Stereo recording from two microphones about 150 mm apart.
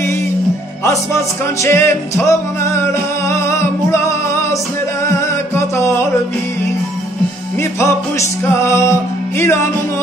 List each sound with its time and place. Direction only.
0.8 s music: 20° left (ahead or behind)
7.8 s music: 20° left (ahead or behind)